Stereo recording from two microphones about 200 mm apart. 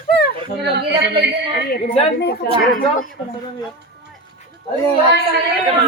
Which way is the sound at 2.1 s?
55° left (ahead or behind).